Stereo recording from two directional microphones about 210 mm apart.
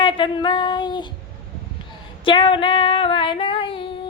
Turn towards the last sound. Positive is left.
turn(degrees=25)  # may be behind; listen again after turning